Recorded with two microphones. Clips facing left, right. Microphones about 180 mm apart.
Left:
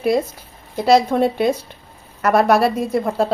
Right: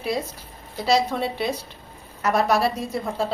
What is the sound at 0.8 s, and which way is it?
A woman's voice, 50° left (ahead or behind).